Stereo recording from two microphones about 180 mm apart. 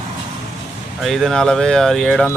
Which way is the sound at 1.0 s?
Centre (ahead or behind).